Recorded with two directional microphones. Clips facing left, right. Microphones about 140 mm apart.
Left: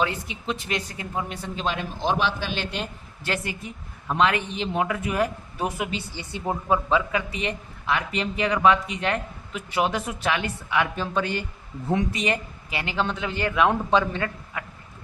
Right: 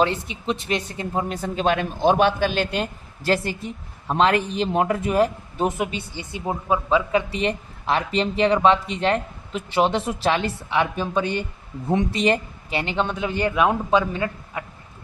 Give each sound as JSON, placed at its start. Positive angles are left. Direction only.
{"t": 0.0, "sound": "speech", "side_deg": -25}
{"t": 1.1, "sound": "a man's voice", "side_deg": -40}
{"t": 3.3, "sound": "speech", "side_deg": -35}
{"t": 5.0, "sound": "a woman's voice", "side_deg": -30}
{"t": 14.5, "sound": "speech", "side_deg": -20}